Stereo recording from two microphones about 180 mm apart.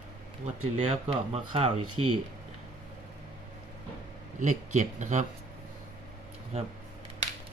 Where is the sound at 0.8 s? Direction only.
35° right (ahead or behind).